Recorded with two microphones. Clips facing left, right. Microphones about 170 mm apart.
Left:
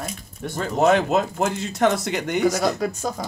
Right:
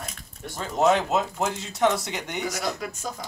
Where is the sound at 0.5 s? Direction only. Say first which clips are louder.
Left 3 dB; 60° left (ahead or behind).